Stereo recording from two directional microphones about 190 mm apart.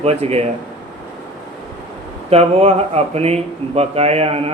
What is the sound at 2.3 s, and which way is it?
Speech, 30° right (ahead or behind).